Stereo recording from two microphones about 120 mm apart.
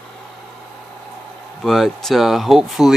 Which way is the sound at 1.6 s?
Centre (ahead or behind).